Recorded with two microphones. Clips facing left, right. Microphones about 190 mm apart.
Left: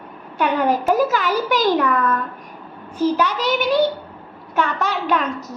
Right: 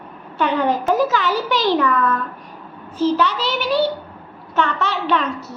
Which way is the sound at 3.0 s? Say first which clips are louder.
Right 1 dB; 15° left (ahead or behind).